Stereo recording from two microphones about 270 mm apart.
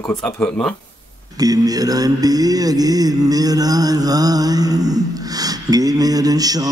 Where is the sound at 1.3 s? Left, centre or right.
Centre.